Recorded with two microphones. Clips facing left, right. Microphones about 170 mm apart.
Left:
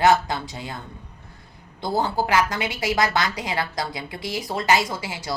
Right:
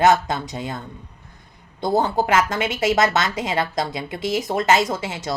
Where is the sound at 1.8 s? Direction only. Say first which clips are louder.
Right 4 dB; 20° right (ahead or behind).